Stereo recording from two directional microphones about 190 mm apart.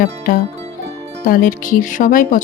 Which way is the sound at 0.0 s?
50° left (ahead or behind).